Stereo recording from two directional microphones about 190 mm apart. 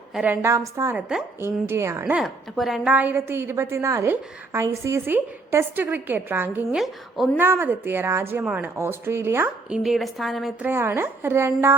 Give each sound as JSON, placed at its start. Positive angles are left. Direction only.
{"t": 0.1, "sound": "a woman's voice", "side_deg": -5}
{"t": 2.1, "sound": "a woman's voice", "side_deg": 0}